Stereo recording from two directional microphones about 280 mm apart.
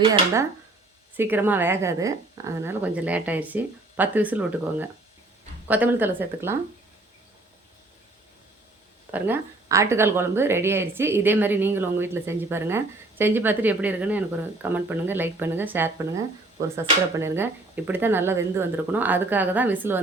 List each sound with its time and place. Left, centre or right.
0.0 s a woman's voice: centre
9.1 s a woman's voice: centre
17.2 s a woman's voice: centre